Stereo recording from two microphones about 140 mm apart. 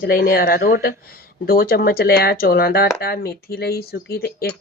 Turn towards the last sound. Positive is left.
turn(degrees=90)